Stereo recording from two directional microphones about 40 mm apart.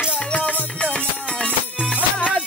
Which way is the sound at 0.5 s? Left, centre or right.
Left.